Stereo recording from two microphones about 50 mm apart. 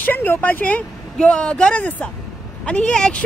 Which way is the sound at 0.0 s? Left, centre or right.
Left.